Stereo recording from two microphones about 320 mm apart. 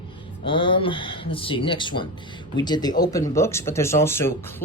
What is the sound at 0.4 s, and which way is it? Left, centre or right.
Speech, centre.